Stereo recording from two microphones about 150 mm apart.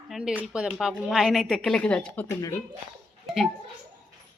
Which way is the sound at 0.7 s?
Centre (ahead or behind).